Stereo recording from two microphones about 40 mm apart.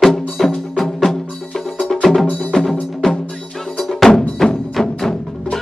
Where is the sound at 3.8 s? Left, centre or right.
Centre.